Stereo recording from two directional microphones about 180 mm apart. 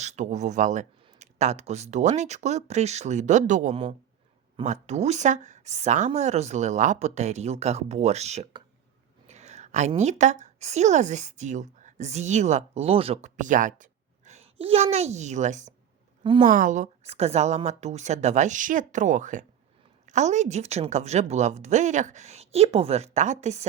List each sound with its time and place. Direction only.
0.0 s a woman's voice: 40° right (ahead or behind)